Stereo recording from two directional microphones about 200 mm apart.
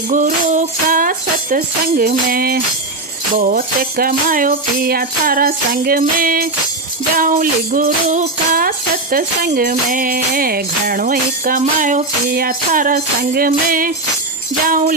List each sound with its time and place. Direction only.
0.1 s music: 40° right (ahead or behind)